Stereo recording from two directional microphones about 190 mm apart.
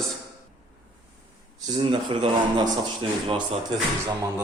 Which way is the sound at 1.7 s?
25° right (ahead or behind).